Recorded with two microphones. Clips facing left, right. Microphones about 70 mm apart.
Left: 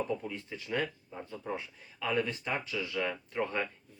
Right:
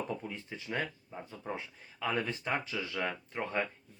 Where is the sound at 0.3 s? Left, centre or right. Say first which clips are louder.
Left 3 dB; right.